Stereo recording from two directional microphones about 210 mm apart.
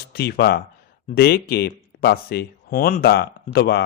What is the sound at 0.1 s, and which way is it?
Speech, 50° left (ahead or behind).